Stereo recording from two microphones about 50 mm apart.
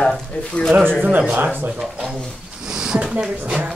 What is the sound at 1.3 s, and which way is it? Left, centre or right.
Speech, right.